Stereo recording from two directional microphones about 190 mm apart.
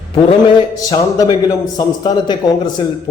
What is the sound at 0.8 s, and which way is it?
A man's voice, 20° left (ahead or behind).